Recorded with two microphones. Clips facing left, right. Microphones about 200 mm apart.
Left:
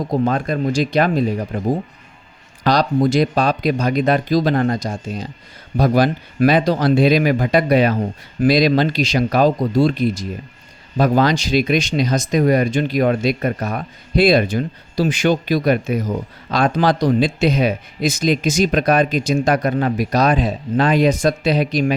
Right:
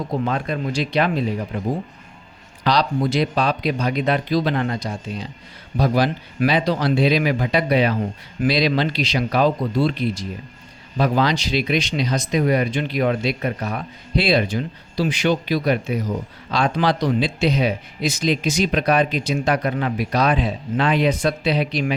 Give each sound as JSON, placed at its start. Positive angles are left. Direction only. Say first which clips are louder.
{"t": 0.1, "sound": "speech", "louder": "left 5 dB", "side_deg": 45}
{"t": 2.6, "sound": "speech", "louder": "left 4 dB", "side_deg": 45}